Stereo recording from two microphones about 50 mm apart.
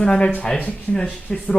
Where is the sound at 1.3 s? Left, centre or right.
Centre.